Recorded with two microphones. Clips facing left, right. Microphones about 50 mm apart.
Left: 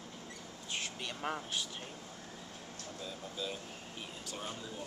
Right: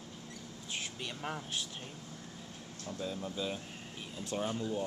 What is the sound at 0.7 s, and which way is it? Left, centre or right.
Vehicle, centre.